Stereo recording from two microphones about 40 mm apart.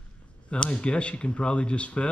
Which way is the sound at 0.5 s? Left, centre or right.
Left.